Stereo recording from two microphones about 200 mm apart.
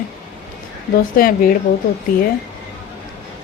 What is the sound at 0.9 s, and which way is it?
Speech, 45° left (ahead or behind).